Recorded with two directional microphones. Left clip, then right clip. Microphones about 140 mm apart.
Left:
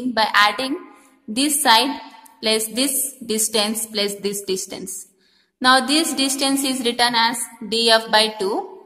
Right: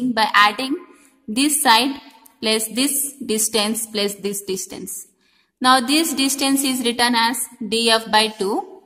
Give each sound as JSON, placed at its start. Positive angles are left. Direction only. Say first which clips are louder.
{"t": 0.1, "sound": "a woman's voice", "louder": "right 1 dB", "side_deg": -40}